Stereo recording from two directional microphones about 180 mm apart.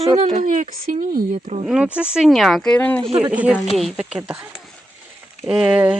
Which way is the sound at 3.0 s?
30° right (ahead or behind).